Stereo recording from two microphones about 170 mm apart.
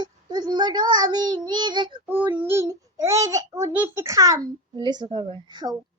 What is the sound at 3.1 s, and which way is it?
A child's voice, 20° right (ahead or behind).